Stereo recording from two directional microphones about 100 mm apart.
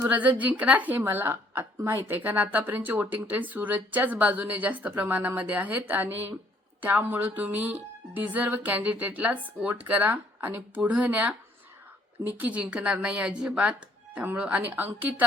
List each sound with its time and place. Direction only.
0.0 s a woman's voice: 15° right (ahead or behind)